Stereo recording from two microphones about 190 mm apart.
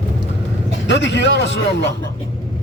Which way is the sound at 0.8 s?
70° left (ahead or behind).